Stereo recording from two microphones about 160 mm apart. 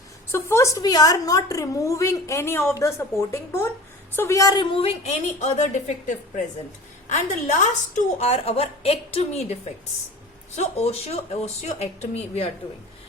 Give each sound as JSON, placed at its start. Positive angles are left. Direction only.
{"t": 0.3, "sound": "a woman's voice", "side_deg": 15}
{"t": 10.5, "sound": "a woman's voice", "side_deg": 45}